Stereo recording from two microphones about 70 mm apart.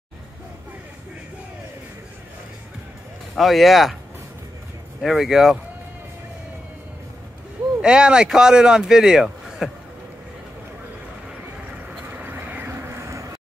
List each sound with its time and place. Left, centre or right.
3.3 s speech: centre
5.0 s speech: centre
7.8 s a man's voice: centre
12.2 s a sound: right
12.6 s vehicle: right